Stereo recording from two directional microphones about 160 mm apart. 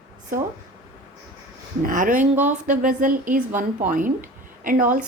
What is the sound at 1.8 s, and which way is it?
A woman's voice, 55° right (ahead or behind).